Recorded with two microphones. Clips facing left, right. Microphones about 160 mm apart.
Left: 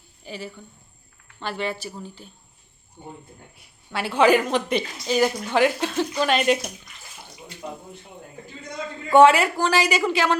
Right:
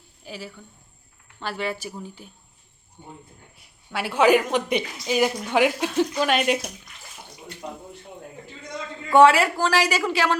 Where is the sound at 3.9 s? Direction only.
10° right (ahead or behind).